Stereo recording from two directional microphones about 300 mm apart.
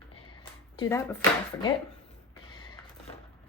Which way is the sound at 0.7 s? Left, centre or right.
Centre.